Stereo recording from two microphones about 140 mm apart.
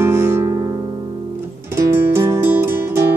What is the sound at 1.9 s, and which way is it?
Music, 20° right (ahead or behind).